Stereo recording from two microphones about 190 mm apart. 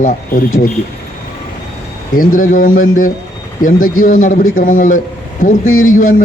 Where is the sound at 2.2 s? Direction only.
45° left (ahead or behind).